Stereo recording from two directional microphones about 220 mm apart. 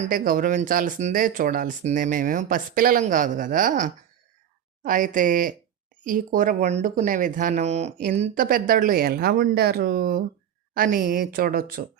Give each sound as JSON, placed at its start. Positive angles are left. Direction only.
{"t": 0.0, "sound": "speech", "side_deg": -40}